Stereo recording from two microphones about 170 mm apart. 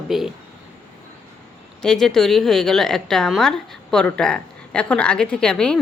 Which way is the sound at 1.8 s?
5° left (ahead or behind).